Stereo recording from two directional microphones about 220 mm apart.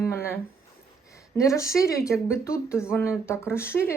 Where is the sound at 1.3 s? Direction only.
15° left (ahead or behind).